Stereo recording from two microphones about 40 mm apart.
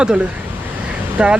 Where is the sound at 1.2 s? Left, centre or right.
Right.